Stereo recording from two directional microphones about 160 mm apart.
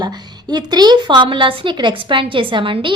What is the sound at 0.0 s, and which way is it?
A woman's voice, 25° right (ahead or behind).